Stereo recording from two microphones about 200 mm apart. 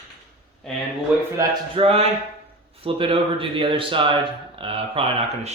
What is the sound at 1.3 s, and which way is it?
Speech, 25° right (ahead or behind).